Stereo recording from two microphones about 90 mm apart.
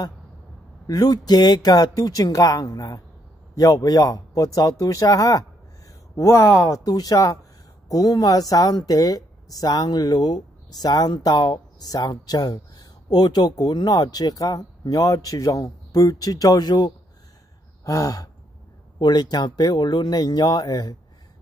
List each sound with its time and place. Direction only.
0.8 s speech: 45° left (ahead or behind)
6.8 s speech: 45° left (ahead or behind)
17.8 s gasp: 40° left (ahead or behind)
18.9 s speech: 50° left (ahead or behind)